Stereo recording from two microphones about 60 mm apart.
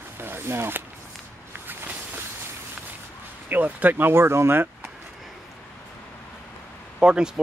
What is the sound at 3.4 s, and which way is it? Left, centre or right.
Speech, right.